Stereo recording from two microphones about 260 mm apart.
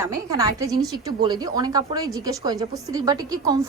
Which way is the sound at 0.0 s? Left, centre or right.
Centre.